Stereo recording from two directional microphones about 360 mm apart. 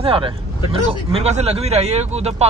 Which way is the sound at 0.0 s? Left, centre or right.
Centre.